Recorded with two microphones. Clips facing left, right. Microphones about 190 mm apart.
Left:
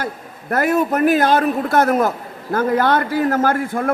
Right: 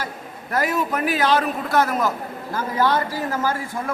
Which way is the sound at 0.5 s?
55° left (ahead or behind).